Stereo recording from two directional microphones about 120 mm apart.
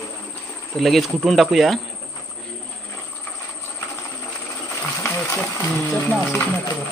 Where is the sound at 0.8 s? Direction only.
Centre (ahead or behind).